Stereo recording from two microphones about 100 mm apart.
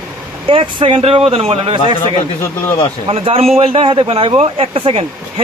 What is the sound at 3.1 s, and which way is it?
Speech, 85° right.